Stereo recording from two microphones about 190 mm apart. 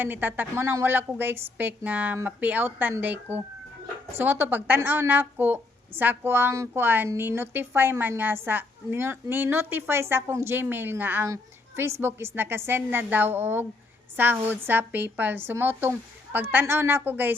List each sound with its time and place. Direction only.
0.0 s a woman's voice: 10° right (ahead or behind)